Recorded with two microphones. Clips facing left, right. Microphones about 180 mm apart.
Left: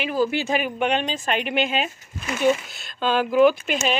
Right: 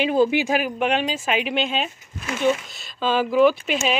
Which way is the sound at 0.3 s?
15° right (ahead or behind).